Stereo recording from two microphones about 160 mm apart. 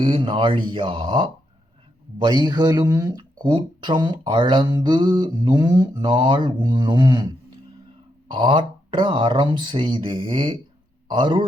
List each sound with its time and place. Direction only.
0.0 s speech: 35° right (ahead or behind)